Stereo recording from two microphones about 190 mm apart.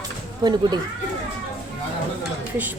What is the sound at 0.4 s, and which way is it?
Speech, 20° right (ahead or behind).